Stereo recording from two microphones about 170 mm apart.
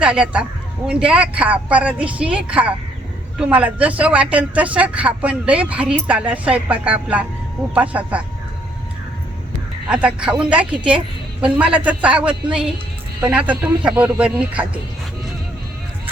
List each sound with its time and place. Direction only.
0.0 s speech: 5° right (ahead or behind)
9.9 s speech: 5° right (ahead or behind)